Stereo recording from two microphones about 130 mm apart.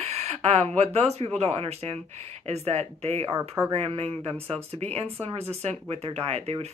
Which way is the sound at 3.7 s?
55° right (ahead or behind).